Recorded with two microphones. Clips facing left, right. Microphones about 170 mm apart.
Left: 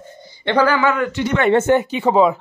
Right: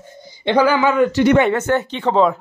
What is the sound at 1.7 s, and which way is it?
Speech, 10° left (ahead or behind).